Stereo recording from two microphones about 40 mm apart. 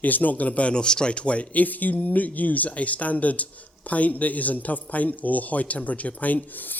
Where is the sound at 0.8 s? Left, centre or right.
Left.